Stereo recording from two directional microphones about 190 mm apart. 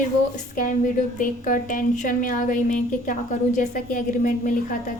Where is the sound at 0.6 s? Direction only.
45° left (ahead or behind).